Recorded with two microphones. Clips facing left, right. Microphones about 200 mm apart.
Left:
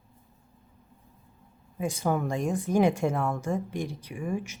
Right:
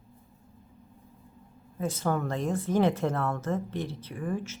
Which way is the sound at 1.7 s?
15° left (ahead or behind).